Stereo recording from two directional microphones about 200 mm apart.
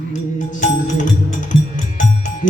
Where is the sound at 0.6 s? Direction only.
40° left (ahead or behind).